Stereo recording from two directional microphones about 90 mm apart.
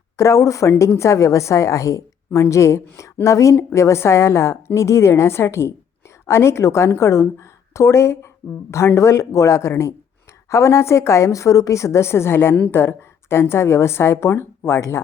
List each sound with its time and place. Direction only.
0.2 s a woman's voice: 35° left (ahead or behind)